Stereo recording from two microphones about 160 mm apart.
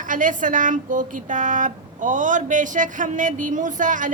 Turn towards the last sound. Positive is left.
turn(degrees=-55)  # may be behind; listen again after turning